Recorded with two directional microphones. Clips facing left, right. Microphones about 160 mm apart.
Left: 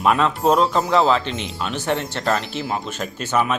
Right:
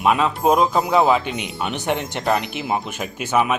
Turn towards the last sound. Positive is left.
turn(degrees=-10)  # may be behind; listen again after turning